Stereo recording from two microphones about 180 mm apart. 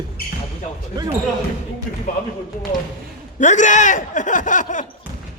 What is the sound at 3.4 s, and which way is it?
Speech, 45° left (ahead or behind).